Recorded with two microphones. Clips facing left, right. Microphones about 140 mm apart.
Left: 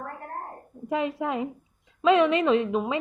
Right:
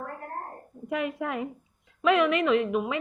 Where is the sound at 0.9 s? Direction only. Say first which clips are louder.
Left 3 dB; 25° left (ahead or behind).